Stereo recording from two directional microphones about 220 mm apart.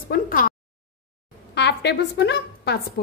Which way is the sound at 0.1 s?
40° left (ahead or behind).